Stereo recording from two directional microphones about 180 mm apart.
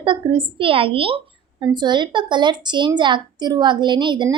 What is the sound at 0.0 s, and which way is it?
Speech, 30° right (ahead or behind).